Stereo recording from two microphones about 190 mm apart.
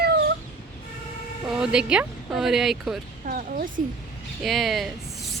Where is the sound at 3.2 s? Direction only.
50° right (ahead or behind).